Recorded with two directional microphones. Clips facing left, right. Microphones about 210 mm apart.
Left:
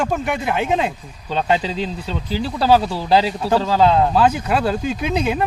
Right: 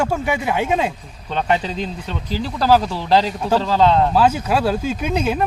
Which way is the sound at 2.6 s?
5° left (ahead or behind).